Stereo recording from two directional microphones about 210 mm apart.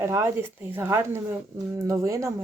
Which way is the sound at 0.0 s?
10° right (ahead or behind).